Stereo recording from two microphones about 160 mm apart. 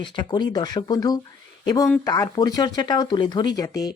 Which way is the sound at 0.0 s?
30° left (ahead or behind).